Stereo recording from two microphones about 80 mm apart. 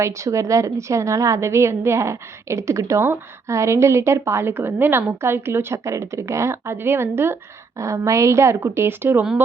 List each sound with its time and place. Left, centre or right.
0.0 s a woman's voice: right